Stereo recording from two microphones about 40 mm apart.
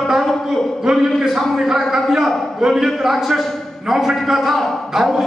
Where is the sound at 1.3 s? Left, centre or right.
Centre.